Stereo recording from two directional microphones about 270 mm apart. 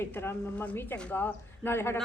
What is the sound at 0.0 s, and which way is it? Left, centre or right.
A woman's voice, centre.